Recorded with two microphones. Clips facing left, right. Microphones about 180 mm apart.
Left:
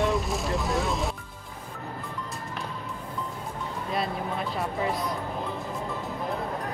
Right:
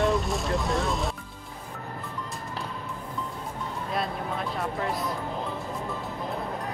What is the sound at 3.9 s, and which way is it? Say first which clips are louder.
Speech: left 1 dB; centre (ahead or behind).